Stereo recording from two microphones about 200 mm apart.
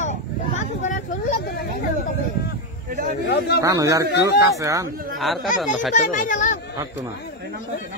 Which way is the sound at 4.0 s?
55° left (ahead or behind).